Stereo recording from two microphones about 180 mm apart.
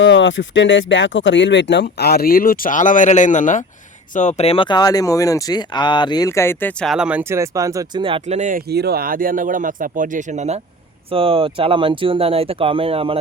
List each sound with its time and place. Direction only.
0.0 s speech: 90° left; by 8.0 s 20° right (ahead or behind)
8.0 s speech: 30° right (ahead or behind)
8.4 s speech: 45° right (ahead or behind)
8.7 s speech: 65° right (ahead or behind); by 13.1 s 30° right (ahead or behind)